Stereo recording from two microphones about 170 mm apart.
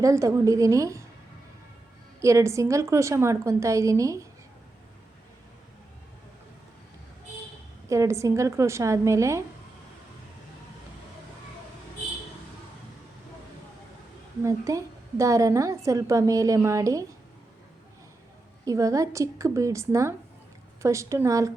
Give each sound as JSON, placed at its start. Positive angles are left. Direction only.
{"t": 0.0, "sound": "a woman's voice", "side_deg": -20}
{"t": 2.2, "sound": "a woman's voice", "side_deg": -15}
{"t": 7.9, "sound": "a woman's voice", "side_deg": -15}
{"t": 14.4, "sound": "a woman's voice", "side_deg": -20}
{"t": 18.6, "sound": "a woman's voice", "side_deg": -20}